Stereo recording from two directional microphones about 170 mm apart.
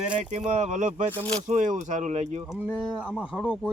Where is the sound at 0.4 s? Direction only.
40° right (ahead or behind).